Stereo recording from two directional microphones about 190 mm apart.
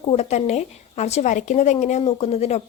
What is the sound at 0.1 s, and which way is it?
Speech, 35° left (ahead or behind).